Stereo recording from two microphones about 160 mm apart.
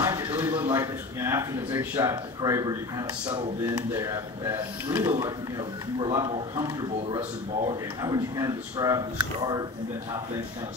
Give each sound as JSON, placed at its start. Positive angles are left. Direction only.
{"t": 0.0, "sound": "a man's voice", "side_deg": -15}